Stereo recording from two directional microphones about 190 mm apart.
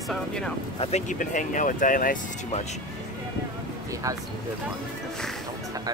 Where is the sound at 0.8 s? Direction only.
40° left (ahead or behind).